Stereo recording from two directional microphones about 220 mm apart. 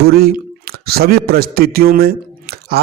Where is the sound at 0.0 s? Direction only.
45° right (ahead or behind).